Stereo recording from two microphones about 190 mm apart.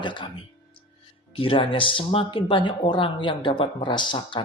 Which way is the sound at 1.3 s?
30° left (ahead or behind).